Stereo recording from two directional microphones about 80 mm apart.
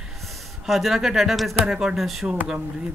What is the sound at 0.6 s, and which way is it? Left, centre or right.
Speech, centre.